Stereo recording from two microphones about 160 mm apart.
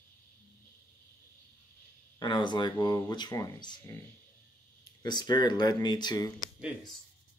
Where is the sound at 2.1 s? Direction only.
25° left (ahead or behind).